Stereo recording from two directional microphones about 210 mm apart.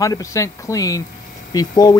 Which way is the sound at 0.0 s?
15° left (ahead or behind).